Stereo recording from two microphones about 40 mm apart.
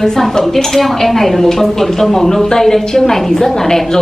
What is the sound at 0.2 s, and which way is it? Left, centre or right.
A woman's voice, centre.